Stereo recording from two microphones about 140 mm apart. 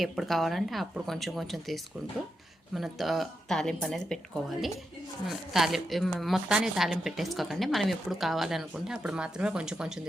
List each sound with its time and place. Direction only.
0.0 s a woman's voice: centre (ahead or behind)